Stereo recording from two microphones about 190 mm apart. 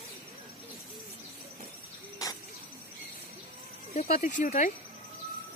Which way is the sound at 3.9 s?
40° left (ahead or behind).